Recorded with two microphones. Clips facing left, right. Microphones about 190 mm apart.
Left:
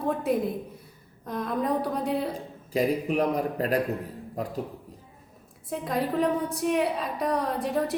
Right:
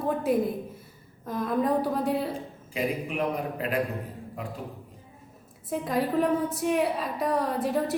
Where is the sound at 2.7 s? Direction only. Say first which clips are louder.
Left 4 dB; 40° left (ahead or behind).